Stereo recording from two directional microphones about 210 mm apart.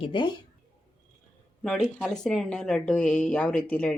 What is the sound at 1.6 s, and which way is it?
Speech, 5° left (ahead or behind).